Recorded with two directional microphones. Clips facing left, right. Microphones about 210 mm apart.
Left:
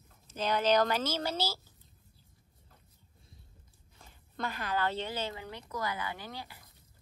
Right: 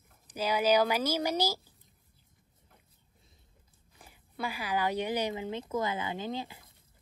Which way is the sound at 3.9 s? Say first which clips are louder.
Right 1 dB; 10° right (ahead or behind).